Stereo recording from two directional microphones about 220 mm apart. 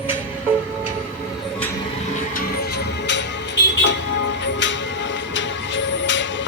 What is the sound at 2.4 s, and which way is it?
Music, 45° left (ahead or behind).